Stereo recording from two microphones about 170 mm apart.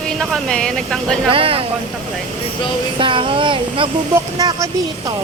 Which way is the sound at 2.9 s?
30° right (ahead or behind).